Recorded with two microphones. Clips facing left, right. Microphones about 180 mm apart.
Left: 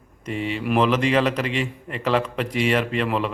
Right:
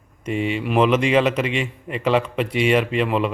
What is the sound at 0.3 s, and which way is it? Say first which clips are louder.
Speech: right 4 dB; 35° left (ahead or behind).